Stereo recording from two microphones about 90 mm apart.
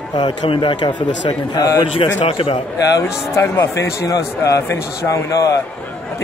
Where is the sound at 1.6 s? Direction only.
50° left (ahead or behind).